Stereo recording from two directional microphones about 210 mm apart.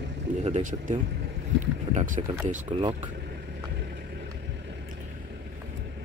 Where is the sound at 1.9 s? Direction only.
40° right (ahead or behind).